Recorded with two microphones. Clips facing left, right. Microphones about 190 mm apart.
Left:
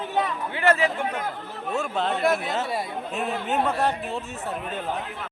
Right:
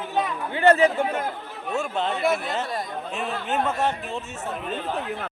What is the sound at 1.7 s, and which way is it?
Speech, centre (ahead or behind).